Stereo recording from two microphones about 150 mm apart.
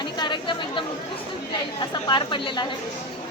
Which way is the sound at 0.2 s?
30° left (ahead or behind).